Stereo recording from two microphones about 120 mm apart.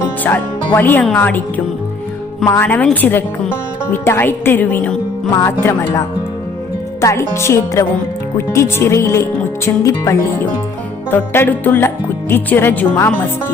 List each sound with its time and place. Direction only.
0.3 s a woman's voice: 15° left (ahead or behind)
7.0 s a woman's voice: 25° left (ahead or behind)